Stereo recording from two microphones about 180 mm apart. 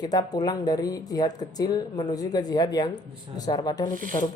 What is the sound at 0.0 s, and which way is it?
Speech, 20° left (ahead or behind).